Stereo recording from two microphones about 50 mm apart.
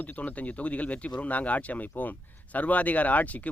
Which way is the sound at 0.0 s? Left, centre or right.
Left.